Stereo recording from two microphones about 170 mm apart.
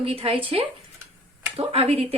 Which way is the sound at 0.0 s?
35° right (ahead or behind).